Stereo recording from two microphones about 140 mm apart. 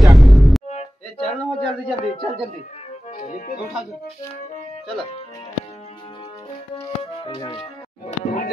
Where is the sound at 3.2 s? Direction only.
60° left (ahead or behind).